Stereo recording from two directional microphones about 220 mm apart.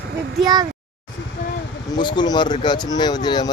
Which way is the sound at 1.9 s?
20° left (ahead or behind).